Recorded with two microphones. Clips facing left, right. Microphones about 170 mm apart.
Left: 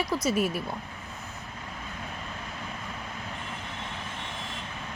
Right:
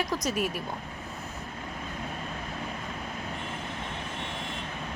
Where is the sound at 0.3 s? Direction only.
40° left (ahead or behind).